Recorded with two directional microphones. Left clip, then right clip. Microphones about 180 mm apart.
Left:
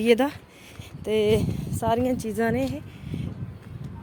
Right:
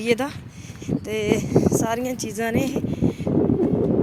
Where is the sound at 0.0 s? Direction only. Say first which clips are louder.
Left 2 dB; 30° left (ahead or behind).